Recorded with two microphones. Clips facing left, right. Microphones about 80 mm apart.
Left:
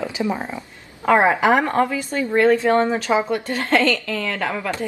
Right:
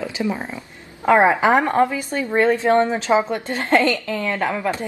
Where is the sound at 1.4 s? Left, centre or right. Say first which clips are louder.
Right 1 dB; right.